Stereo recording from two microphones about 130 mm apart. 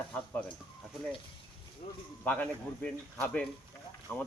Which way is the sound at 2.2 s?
10° left (ahead or behind).